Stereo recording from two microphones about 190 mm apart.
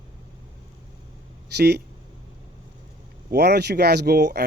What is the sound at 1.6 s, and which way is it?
Speech, 60° right (ahead or behind).